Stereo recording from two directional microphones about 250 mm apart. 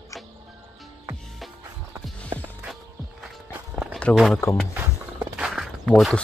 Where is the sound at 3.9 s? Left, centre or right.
Centre.